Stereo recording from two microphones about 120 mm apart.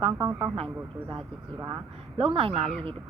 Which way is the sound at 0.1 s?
25° right (ahead or behind).